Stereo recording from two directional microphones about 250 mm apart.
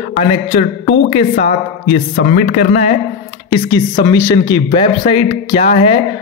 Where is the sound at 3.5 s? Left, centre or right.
Centre.